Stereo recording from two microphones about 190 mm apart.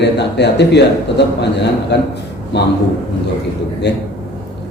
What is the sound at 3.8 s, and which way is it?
Speech, 65° left (ahead or behind).